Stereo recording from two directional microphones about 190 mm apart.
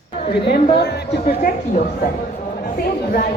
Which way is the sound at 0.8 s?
60° left (ahead or behind).